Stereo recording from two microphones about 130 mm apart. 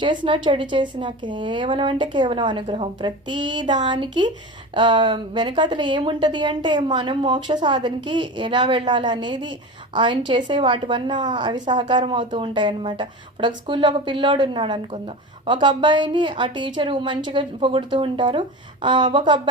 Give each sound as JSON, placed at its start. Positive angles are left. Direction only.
{"t": 0.0, "sound": "a woman's voice", "side_deg": -40}